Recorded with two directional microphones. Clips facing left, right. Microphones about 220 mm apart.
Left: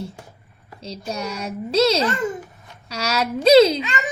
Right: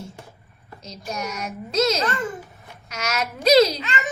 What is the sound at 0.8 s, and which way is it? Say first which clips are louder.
A child's voice: left 3 dB; 30° left (ahead or behind).